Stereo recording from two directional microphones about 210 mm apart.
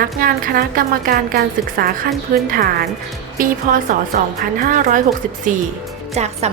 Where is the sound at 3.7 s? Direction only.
40° right (ahead or behind).